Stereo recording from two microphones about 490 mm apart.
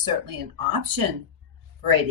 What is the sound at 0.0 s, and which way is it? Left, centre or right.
Speech, right.